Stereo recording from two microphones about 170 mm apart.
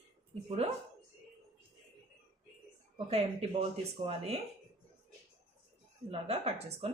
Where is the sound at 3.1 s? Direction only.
40° right (ahead or behind).